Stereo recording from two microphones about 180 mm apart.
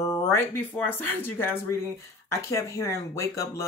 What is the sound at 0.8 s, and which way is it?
Speech, 10° left (ahead or behind).